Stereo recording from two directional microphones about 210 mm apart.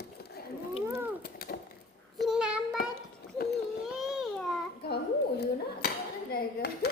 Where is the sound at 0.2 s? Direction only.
50° left (ahead or behind).